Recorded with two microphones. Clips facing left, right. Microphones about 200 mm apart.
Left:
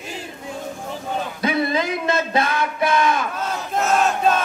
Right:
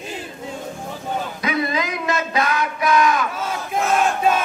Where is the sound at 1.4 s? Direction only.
30° left (ahead or behind).